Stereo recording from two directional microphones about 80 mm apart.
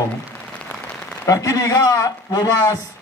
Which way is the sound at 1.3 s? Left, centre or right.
Left.